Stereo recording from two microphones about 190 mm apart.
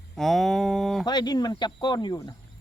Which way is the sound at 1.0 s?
20° left (ahead or behind).